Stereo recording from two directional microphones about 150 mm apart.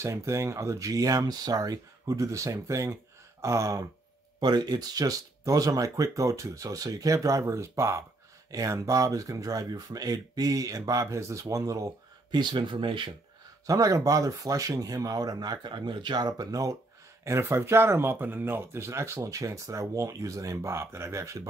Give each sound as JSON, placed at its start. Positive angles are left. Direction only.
{"t": 0.0, "sound": "speech", "side_deg": -20}
{"t": 13.7, "sound": "speech", "side_deg": -20}